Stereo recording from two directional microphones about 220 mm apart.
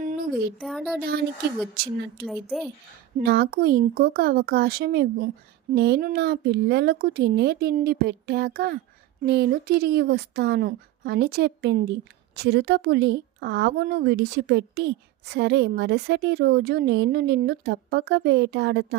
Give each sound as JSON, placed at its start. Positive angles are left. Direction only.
{"t": 0.0, "sound": "a sound", "side_deg": -35}
{"t": 0.6, "sound": "speech", "side_deg": 0}
{"t": 2.2, "sound": "speech", "side_deg": 0}
{"t": 3.2, "sound": "speech", "side_deg": -45}